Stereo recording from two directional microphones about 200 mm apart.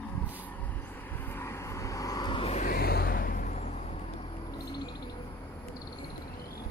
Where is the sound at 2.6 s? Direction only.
50° left (ahead or behind); by 4.2 s 35° left (ahead or behind).